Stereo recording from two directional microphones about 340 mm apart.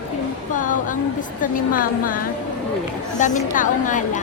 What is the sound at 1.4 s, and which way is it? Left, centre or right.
A woman's voice, left.